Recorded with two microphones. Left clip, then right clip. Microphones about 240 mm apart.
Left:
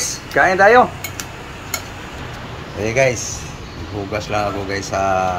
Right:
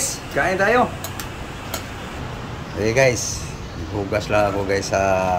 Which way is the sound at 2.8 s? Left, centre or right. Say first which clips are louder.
Left 1 dB; centre.